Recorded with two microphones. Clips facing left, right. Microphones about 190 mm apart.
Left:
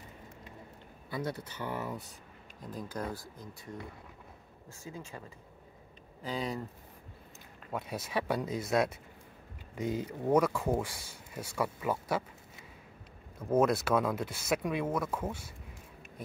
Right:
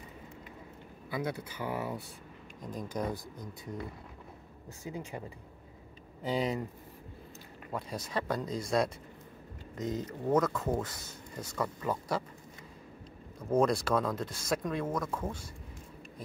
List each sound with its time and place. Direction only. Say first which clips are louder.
1.1 s speech: right 1 dB; 10° right (ahead or behind)
4.8 s speech: right 4 dB; 15° right (ahead or behind)
6.2 s speech: right 4 dB; 20° right (ahead or behind)
7.7 s speech: left 1 dB; 5° left (ahead or behind)
13.5 s speech: even; 5° left (ahead or behind)